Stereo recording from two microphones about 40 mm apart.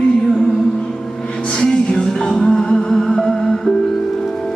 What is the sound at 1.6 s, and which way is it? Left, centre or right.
Music, centre.